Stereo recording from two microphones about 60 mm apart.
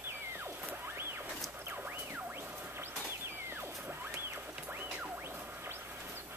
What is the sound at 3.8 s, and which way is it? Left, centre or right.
Music, right.